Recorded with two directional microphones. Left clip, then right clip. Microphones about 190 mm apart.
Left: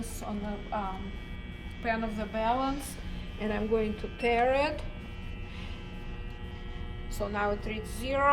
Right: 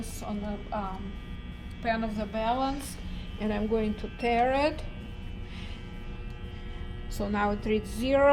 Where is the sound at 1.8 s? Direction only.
20° right (ahead or behind).